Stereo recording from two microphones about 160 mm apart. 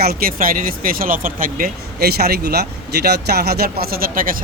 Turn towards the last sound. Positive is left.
turn(degrees=-65)  # may be behind; listen again after turning